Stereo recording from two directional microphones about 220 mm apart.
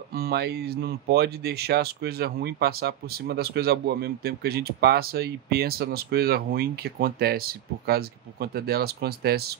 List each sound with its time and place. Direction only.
0.1 s speech: 45° right (ahead or behind)